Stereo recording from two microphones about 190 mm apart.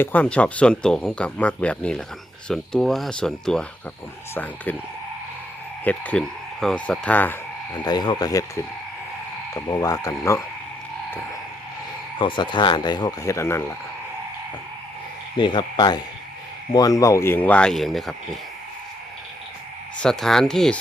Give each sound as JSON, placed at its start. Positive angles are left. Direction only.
{"t": 0.0, "sound": "speech", "side_deg": 10}
{"t": 5.8, "sound": "speech", "side_deg": 10}
{"t": 7.7, "sound": "speech", "side_deg": 20}
{"t": 9.6, "sound": "speech", "side_deg": 20}
{"t": 12.2, "sound": "speech", "side_deg": 25}
{"t": 15.4, "sound": "speech", "side_deg": 25}
{"t": 20.0, "sound": "speech", "side_deg": 0}